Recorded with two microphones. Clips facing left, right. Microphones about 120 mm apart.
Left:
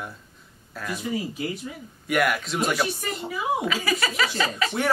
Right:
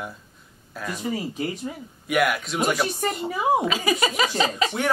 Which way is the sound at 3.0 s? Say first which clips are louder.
Right 6 dB; 40° right (ahead or behind).